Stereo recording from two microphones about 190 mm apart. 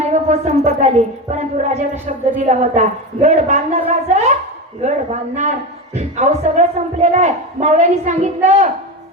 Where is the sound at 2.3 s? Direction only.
40° right (ahead or behind).